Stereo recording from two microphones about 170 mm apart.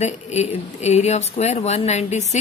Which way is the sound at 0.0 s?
40° left (ahead or behind).